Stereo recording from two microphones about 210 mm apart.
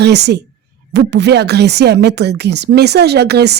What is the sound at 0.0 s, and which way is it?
Speech, 55° right (ahead or behind).